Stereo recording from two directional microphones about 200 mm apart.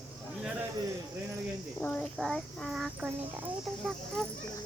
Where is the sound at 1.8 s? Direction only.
5° left (ahead or behind).